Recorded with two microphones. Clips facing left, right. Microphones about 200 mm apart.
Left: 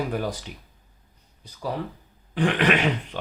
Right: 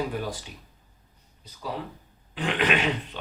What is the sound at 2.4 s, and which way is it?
Speech, 55° left (ahead or behind).